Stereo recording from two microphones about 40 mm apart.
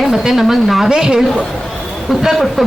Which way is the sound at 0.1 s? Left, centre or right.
Centre.